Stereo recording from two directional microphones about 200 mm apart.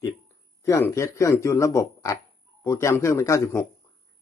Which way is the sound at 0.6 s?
15° left (ahead or behind).